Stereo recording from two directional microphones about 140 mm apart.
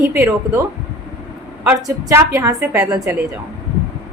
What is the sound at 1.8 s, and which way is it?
A woman's voice, 20° right (ahead or behind).